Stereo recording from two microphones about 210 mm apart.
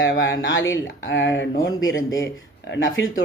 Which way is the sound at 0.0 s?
65° left (ahead or behind).